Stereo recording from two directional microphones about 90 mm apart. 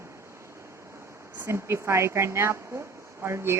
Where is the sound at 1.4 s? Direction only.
30° right (ahead or behind).